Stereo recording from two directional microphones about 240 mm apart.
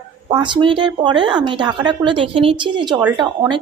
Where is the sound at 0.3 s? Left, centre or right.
Centre.